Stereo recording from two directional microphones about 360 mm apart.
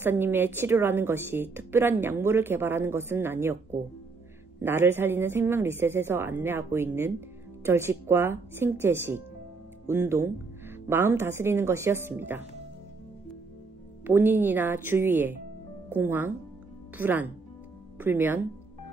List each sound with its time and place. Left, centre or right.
0.0 s a woman's voice: centre
14.0 s a woman's voice: centre